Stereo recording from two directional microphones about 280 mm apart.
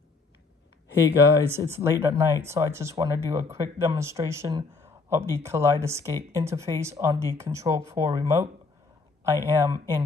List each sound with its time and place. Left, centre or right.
1.5 s speech: centre